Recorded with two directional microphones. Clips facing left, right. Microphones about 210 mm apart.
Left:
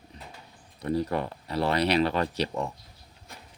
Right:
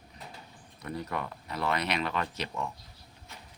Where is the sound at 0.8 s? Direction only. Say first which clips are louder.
Left 8 dB; 30° left (ahead or behind).